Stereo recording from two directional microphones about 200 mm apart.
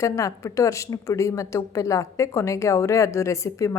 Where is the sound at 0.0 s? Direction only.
15° left (ahead or behind).